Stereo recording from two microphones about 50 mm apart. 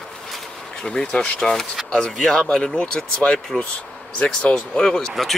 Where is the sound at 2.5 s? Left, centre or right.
Left.